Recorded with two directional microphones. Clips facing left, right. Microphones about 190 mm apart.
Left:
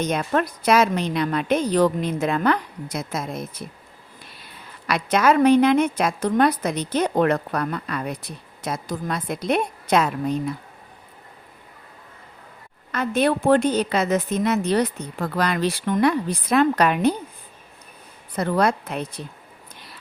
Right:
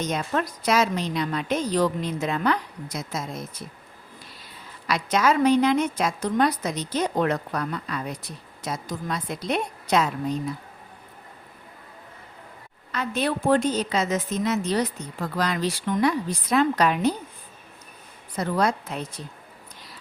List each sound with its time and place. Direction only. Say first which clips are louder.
0.0 s a woman's voice: left 4 dB; 60° left (ahead or behind)
4.9 s a woman's voice: left 3 dB; 60° left (ahead or behind)
12.9 s a woman's voice: left 5 dB; 50° left (ahead or behind)
18.3 s a woman's voice: left 3 dB; 60° left (ahead or behind)